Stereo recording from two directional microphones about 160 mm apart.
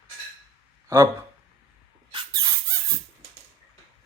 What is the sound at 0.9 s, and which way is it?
Speech, 20° right (ahead or behind).